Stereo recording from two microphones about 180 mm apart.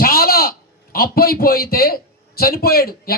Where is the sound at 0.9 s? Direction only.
55° left (ahead or behind).